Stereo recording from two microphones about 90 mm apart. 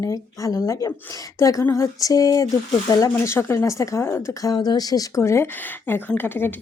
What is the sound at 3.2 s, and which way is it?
Speech, 30° left (ahead or behind).